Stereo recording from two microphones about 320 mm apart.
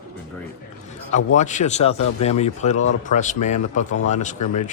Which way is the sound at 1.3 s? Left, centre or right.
Left.